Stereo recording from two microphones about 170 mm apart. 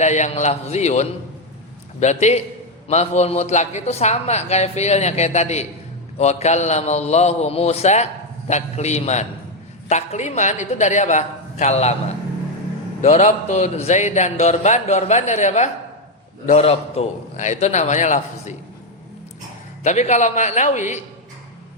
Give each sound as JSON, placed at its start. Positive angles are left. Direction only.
{"t": 0.0, "sound": "a man's voice", "side_deg": 45}
{"t": 19.8, "sound": "a man's voice", "side_deg": 45}